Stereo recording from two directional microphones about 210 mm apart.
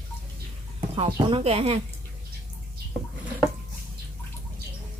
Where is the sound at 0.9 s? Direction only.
25° right (ahead or behind).